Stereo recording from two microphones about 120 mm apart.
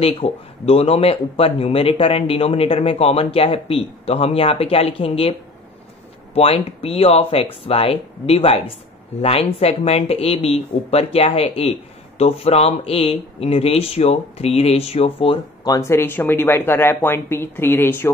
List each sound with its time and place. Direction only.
0.0 s speech: 55° left (ahead or behind)
6.3 s speech: 55° left (ahead or behind)
15.6 s speech: 25° left (ahead or behind)